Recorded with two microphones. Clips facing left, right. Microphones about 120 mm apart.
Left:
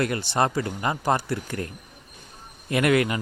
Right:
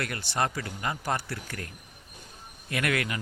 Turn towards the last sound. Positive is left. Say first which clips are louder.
# left 8 dB
turn(degrees=25)  # may be behind; listen again after turning